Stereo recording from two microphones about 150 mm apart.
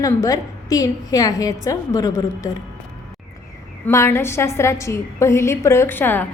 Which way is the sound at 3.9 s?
15° left (ahead or behind).